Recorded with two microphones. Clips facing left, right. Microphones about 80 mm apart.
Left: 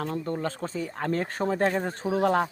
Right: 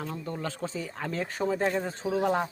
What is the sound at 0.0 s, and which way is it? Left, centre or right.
Speech, left.